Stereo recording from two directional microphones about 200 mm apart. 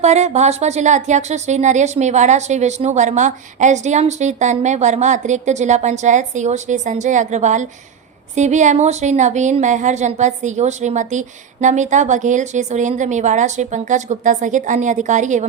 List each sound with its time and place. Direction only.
0.0 s a woman's voice: 35° right (ahead or behind)